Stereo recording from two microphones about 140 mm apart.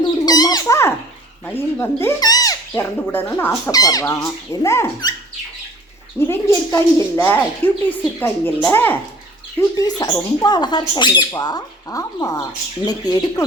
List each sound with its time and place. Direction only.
0.3 s bird: 25° left (ahead or behind)
1.5 s a woman's voice: 15° left (ahead or behind)
2.2 s a sound: 25° left (ahead or behind)
3.1 s a woman's voice: 15° left (ahead or behind)
3.7 s speech: 25° left (ahead or behind)
6.1 s a woman's voice: 20° left (ahead or behind)
9.6 s speech: 25° left (ahead or behind)